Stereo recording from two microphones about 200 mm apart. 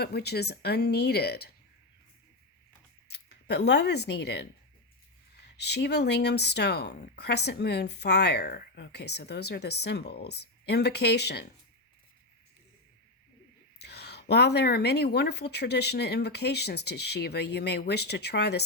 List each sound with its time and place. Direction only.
0.0 s speech: 55° left (ahead or behind)
3.1 s speech: 55° left (ahead or behind)
5.5 s speech: 55° left (ahead or behind)
13.7 s speech: 55° left (ahead or behind)